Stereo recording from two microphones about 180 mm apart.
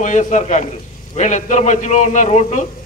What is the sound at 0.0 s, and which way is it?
Speech, 40° left (ahead or behind).